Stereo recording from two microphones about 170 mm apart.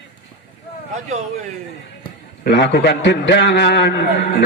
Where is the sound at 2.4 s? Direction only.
75° left (ahead or behind).